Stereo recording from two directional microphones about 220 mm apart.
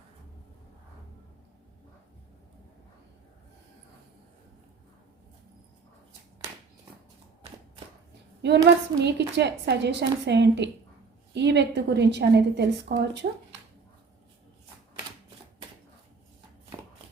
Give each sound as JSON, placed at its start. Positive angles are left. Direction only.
{"t": 8.4, "sound": "a woman's voice", "side_deg": -50}